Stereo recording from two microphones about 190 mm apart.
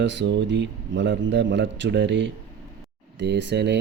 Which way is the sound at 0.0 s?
70° right (ahead or behind).